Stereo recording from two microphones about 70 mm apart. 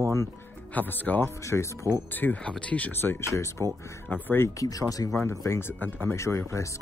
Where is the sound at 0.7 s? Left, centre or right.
Left.